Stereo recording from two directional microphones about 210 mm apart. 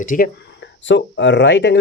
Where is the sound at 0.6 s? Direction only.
60° left (ahead or behind).